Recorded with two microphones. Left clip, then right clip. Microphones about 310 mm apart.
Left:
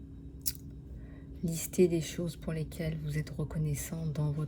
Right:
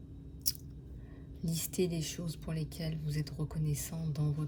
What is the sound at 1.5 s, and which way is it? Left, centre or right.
Speech, centre.